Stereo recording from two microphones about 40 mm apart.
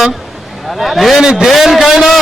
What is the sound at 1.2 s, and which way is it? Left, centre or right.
Speech, centre.